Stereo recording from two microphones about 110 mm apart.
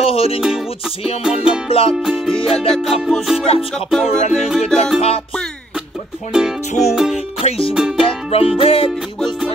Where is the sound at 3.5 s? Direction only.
65° left (ahead or behind).